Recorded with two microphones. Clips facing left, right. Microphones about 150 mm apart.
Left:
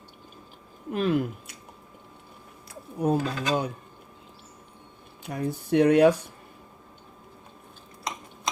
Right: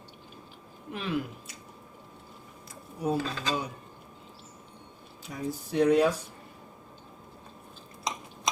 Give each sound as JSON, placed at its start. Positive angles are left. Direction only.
{"t": 0.9, "sound": "speech", "side_deg": 45}
{"t": 3.0, "sound": "speech", "side_deg": 50}
{"t": 5.3, "sound": "speech", "side_deg": 60}